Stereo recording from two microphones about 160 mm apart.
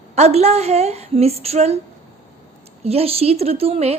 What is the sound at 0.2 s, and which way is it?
A woman's voice, 40° right (ahead or behind).